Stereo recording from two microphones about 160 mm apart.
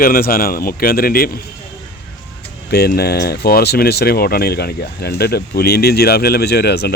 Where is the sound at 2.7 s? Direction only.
80° left.